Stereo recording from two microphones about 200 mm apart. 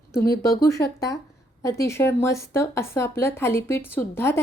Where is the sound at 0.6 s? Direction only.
20° left (ahead or behind).